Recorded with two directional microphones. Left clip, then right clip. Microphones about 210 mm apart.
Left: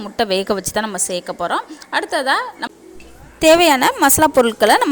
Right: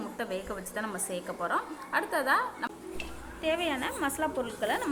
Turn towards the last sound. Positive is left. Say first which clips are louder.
# left 19 dB
turn(degrees=55)  # may be behind; listen again after turning